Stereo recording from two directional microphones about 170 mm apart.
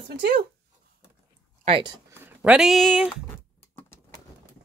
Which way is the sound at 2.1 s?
10° right (ahead or behind).